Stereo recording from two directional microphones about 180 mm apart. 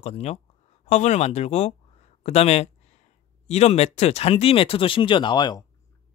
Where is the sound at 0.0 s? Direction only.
35° left (ahead or behind).